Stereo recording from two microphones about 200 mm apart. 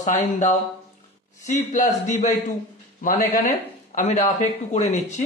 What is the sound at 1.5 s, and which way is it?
Speech, 35° left (ahead or behind).